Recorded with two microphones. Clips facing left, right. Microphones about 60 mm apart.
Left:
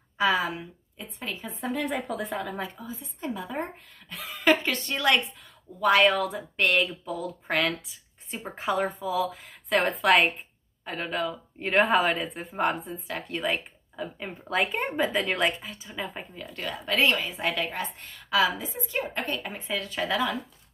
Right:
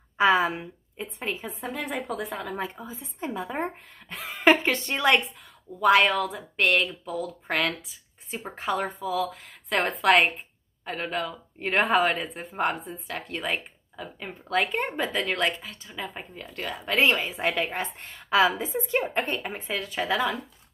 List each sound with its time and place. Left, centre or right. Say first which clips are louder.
0.2 s a woman's voice: right 4 dB; right
1.5 s speech: left 2 dB; centre
2.6 s a woman's voice: right 2 dB; right
5.8 s a woman's voice: right 1 dB; centre
17.7 s a woman's voice: right 2 dB; right; by 20.2 s centre